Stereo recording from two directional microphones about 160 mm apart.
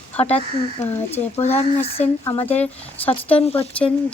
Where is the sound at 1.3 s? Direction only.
40° left (ahead or behind).